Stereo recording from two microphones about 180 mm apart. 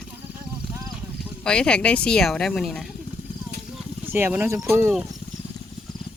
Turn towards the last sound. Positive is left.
turn(degrees=-15)  # may be behind; listen again after turning